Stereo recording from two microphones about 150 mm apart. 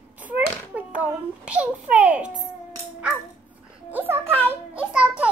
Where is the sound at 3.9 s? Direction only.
15° right (ahead or behind).